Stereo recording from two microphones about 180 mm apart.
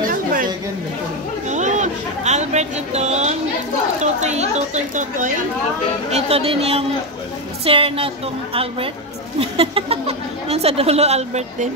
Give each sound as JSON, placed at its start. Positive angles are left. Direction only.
{"t": 0.0, "sound": "chatter", "side_deg": -50}
{"t": 1.5, "sound": "a sound", "side_deg": -40}
{"t": 4.0, "sound": "a woman's voice", "side_deg": -40}